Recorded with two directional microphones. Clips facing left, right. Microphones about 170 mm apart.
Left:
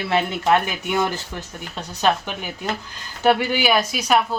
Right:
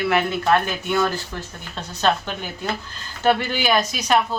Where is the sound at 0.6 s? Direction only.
15° left (ahead or behind).